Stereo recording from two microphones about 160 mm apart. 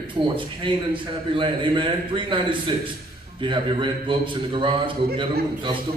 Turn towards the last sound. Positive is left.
turn(degrees=-30)  # may be behind; listen again after turning